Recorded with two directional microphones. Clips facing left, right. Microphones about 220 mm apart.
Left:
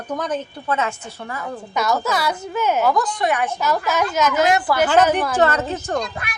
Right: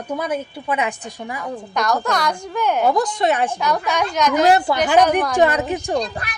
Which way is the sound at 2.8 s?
25° right (ahead or behind).